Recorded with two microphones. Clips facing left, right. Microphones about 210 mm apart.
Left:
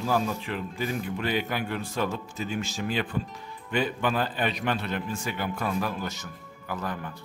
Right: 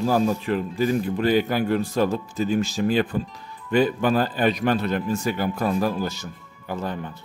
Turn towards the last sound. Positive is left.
turn(degrees=-25)  # may be behind; listen again after turning